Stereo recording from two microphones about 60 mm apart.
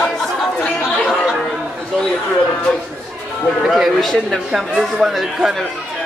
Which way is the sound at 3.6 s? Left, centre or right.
Centre.